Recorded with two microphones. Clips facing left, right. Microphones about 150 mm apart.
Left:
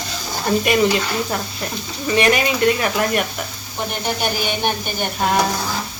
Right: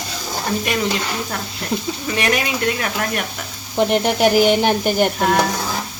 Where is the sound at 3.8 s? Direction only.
90° right.